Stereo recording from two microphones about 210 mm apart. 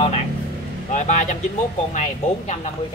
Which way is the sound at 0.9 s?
35° left (ahead or behind).